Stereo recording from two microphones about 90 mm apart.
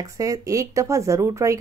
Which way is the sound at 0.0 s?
40° right (ahead or behind).